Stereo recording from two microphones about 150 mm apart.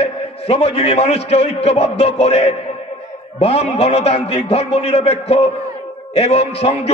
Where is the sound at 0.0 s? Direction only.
40° left (ahead or behind).